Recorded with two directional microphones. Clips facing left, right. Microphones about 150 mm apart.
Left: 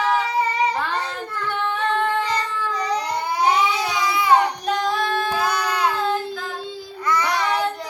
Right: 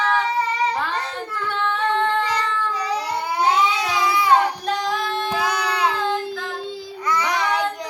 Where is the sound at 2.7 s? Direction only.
5° right (ahead or behind).